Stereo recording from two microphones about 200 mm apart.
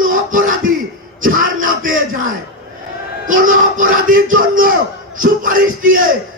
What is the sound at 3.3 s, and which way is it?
A man's voice, 40° right (ahead or behind).